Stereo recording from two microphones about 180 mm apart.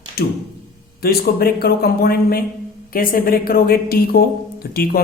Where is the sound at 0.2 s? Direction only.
60° left (ahead or behind).